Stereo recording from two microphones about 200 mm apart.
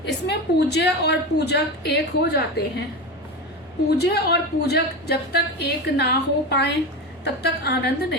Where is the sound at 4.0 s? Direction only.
55° left (ahead or behind).